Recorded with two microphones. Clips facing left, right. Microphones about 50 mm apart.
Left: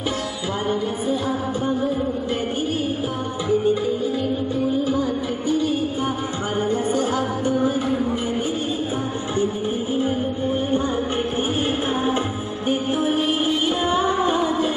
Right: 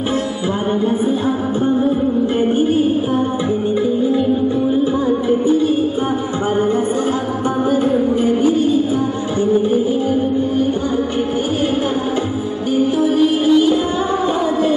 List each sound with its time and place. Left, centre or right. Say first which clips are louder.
8.5 s music: right 10 dB; left
12.7 s music: right 8 dB; left